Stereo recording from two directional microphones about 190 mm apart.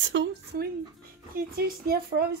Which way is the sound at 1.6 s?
55° right (ahead or behind).